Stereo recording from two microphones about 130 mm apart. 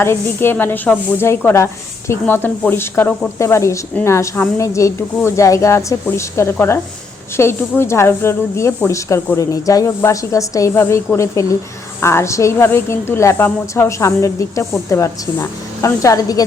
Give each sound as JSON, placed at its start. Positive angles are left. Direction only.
{"t": 0.0, "sound": "speech", "side_deg": 20}